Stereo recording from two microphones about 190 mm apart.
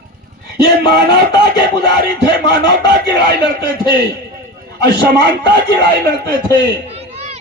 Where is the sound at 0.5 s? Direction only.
20° left (ahead or behind).